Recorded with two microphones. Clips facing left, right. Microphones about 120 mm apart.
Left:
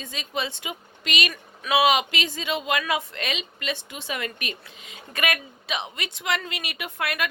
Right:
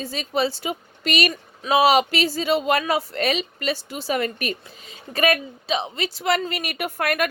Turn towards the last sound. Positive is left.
turn(degrees=-45)  # may be behind; listen again after turning